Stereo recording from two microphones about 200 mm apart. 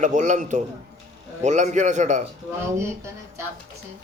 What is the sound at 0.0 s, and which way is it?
A man's voice, 40° right (ahead or behind).